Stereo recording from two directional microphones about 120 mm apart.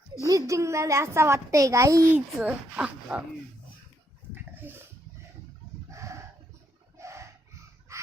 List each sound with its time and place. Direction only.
0.2 s a child's voice: 25° right (ahead or behind)
2.4 s speech: 10° right (ahead or behind)
4.4 s dog: 15° right (ahead or behind)
5.9 s chicken: 25° right (ahead or behind)
6.9 s a sound: 25° right (ahead or behind)
7.9 s fowl: 25° right (ahead or behind)